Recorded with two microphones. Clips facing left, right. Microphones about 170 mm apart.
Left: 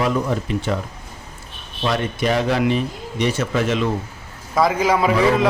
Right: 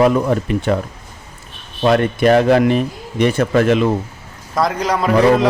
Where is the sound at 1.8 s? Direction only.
55° right (ahead or behind).